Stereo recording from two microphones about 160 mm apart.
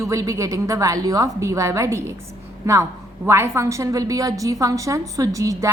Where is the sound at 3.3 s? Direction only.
15° right (ahead or behind).